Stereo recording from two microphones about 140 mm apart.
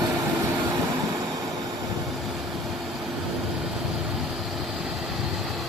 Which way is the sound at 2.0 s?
Centre (ahead or behind).